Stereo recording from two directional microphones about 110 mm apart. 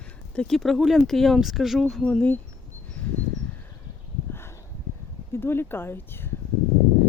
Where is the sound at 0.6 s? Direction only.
Centre (ahead or behind).